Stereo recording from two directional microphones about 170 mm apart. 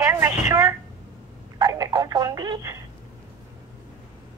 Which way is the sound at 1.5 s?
25° right (ahead or behind).